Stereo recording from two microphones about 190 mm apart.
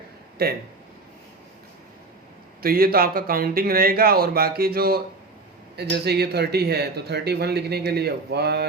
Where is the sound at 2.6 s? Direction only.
50° right (ahead or behind).